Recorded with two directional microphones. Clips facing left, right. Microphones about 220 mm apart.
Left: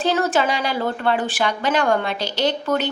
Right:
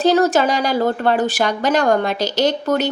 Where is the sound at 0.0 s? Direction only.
40° right (ahead or behind).